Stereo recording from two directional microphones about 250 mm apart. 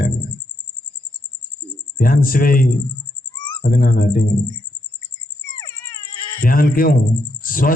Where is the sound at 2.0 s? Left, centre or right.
Left.